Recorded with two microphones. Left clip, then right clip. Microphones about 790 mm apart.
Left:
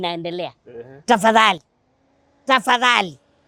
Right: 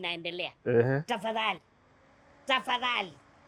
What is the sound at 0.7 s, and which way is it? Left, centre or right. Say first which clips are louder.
Speech: right 12 dB; right.